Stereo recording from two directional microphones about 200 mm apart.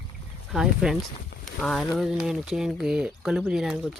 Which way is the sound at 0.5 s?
5° right (ahead or behind).